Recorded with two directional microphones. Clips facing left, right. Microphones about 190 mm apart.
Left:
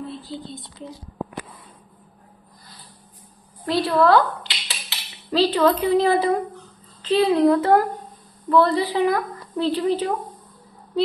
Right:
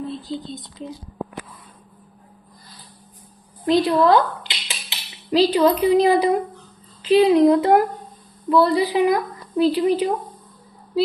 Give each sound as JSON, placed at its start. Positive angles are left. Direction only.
{"t": 0.2, "sound": "speech", "side_deg": -20}
{"t": 3.6, "sound": "a woman's voice", "side_deg": -20}